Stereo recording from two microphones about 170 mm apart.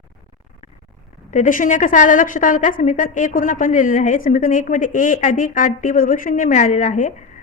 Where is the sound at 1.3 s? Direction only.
50° left (ahead or behind).